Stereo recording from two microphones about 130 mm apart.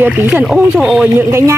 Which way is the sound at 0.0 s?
10° right (ahead or behind).